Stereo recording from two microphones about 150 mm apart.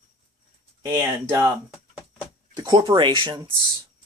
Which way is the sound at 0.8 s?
15° right (ahead or behind).